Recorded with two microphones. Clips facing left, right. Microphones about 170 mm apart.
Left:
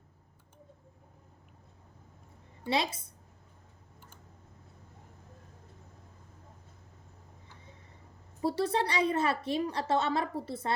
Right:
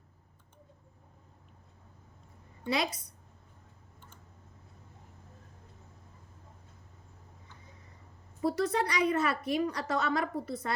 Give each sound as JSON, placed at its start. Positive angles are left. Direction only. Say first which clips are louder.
{"t": 2.6, "sound": "a woman's voice", "louder": "left 1 dB", "side_deg": 25}
{"t": 8.4, "sound": "a woman's voice", "louder": "even", "side_deg": 30}